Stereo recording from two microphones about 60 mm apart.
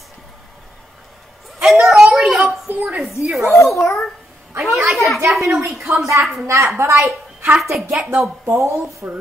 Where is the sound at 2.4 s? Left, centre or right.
Right.